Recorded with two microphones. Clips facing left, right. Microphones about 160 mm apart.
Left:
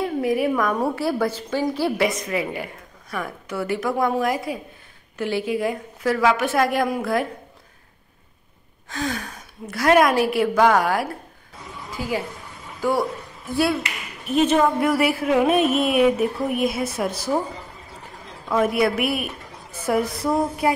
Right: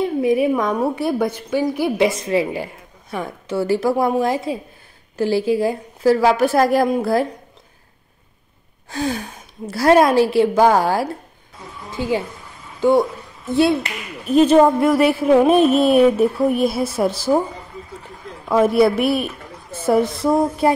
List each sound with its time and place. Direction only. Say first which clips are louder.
0.0 s a woman's voice: right 4 dB; 20° right (ahead or behind)
2.0 s a woman's voice: right 5 dB; 30° right (ahead or behind)
8.8 s a woman's voice: right 4 dB; 30° right (ahead or behind)
14.2 s speech: right 6 dB; 35° right (ahead or behind)
18.5 s a woman's voice: right 5 dB; 30° right (ahead or behind)